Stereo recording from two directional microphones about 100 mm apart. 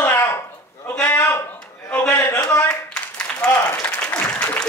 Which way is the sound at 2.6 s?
10° left (ahead or behind).